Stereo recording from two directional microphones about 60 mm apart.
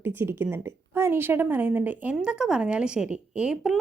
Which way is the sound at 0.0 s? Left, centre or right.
Right.